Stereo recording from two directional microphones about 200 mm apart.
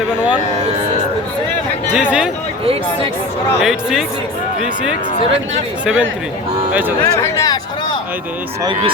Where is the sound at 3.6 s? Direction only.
Centre (ahead or behind).